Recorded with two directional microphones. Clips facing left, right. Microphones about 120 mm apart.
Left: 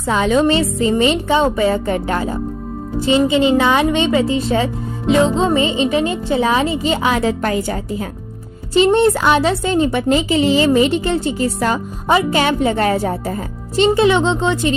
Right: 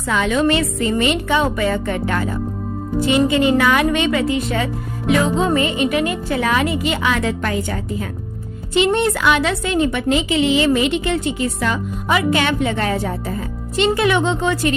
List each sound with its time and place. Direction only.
0.0 s a woman's voice: 30° left (ahead or behind)
13.9 s a woman's voice: 25° left (ahead or behind)